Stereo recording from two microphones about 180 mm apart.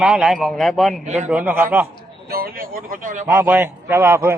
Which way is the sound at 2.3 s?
55° right (ahead or behind).